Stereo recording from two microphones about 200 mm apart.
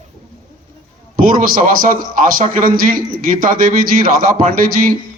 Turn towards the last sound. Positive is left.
turn(degrees=-45)  # may be behind; listen again after turning